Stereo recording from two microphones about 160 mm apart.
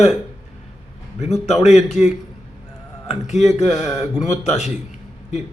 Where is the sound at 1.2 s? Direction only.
45° left (ahead or behind).